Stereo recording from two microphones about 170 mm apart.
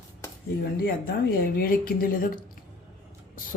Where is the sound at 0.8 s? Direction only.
60° left (ahead or behind).